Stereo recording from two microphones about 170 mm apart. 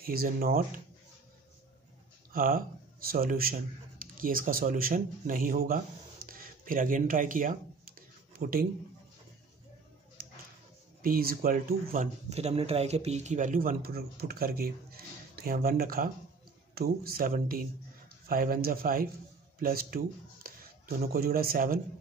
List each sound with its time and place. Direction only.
0.0 s speech: 60° right (ahead or behind)
2.3 s speech: 55° right (ahead or behind)
11.0 s speech: 60° right (ahead or behind)
12.3 s speech: 40° right (ahead or behind); by 21.7 s 60° right (ahead or behind)